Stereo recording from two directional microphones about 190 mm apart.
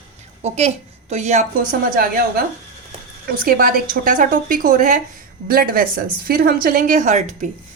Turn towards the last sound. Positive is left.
turn(degrees=-40)  # may be behind; listen again after turning